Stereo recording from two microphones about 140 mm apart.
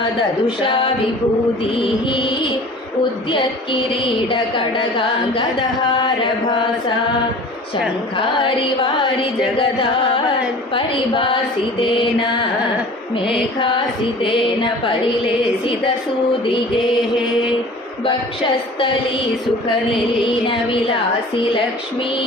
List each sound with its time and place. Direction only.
1.7 s speech: 40° left (ahead or behind)
6.5 s speech: 35° left (ahead or behind)
8.1 s speech: 35° left (ahead or behind)
10.8 s speech: 40° left (ahead or behind)
13.6 s speech: 35° left (ahead or behind)
20.2 s speech: 40° left (ahead or behind)